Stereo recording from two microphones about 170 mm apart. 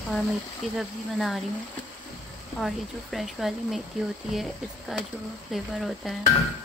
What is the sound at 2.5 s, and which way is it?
Speech, centre (ahead or behind).